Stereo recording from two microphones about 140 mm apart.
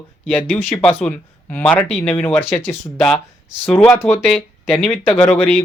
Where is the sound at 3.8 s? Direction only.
20° left (ahead or behind).